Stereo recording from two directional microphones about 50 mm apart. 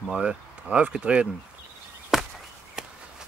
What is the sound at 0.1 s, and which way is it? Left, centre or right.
Speech, right.